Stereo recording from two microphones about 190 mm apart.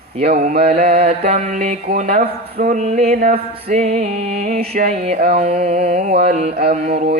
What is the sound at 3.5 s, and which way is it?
Mantra, 35° right (ahead or behind).